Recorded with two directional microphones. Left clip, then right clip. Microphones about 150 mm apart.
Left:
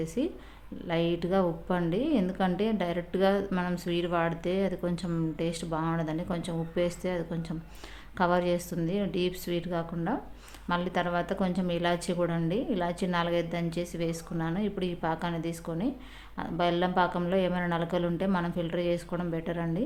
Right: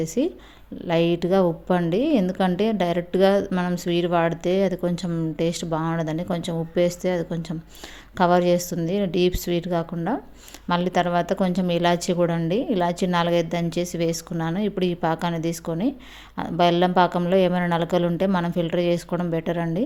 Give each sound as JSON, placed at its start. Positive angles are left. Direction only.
{"t": 0.0, "sound": "speech", "side_deg": -35}